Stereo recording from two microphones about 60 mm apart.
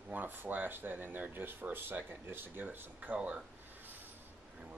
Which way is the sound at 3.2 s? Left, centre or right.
Centre.